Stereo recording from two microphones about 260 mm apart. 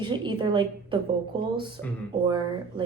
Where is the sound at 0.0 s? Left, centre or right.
Centre.